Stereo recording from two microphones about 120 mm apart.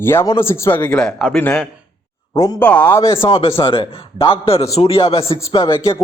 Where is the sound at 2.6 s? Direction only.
10° left (ahead or behind).